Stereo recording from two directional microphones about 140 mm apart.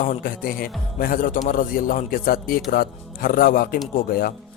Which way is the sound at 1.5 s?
85° left.